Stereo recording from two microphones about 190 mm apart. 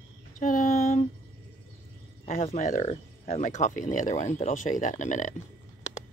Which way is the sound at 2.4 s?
40° left (ahead or behind).